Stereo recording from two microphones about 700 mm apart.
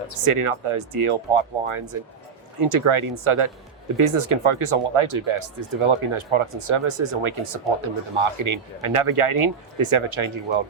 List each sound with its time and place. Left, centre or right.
0.3 s speech: right